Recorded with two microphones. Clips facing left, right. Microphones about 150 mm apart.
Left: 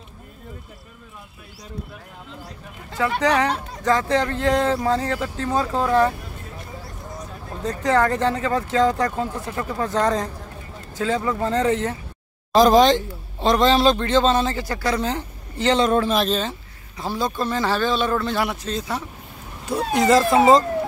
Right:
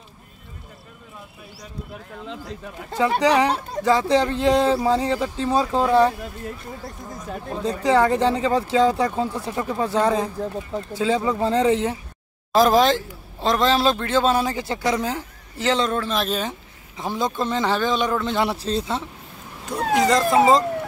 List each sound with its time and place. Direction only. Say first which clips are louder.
3.2 s speech: right 1 dB; 10° right (ahead or behind)
7.6 s speech: right 1 dB; 15° right (ahead or behind)
12.5 s a man's voice: left 2 dB; 5° right (ahead or behind)
14.6 s a man's voice: right 1 dB; 20° right (ahead or behind)
15.0 s a woman's voice: left 1 dB; 5° right (ahead or behind)
15.8 s speech: left 4 dB; 15° left (ahead or behind)
16.2 s a man's voice: left 2 dB; 10° right (ahead or behind)
18.5 s speech: right 2 dB; 30° right (ahead or behind)
19.7 s a man's voice: left 2 dB; centre (ahead or behind)